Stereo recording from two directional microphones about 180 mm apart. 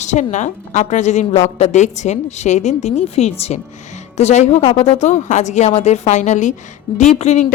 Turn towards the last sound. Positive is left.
turn(degrees=40)  # may be behind; listen again after turning